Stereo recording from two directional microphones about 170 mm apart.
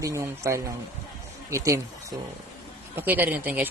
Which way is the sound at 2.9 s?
10° right (ahead or behind).